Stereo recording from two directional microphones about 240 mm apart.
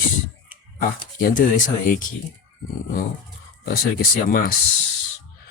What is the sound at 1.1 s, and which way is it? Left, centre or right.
Speech, left.